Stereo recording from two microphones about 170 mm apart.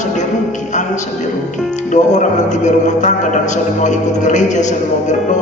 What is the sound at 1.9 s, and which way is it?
Music, 45° left (ahead or behind).